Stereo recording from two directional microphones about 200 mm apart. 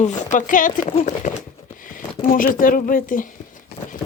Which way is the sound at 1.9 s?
45° left (ahead or behind).